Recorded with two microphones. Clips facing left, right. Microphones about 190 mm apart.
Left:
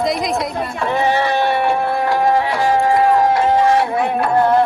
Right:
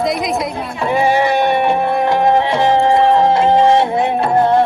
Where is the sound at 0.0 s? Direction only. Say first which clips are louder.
Right 1 dB; centre (ahead or behind).